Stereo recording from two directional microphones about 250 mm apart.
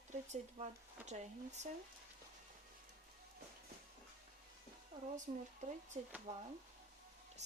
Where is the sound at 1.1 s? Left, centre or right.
Right.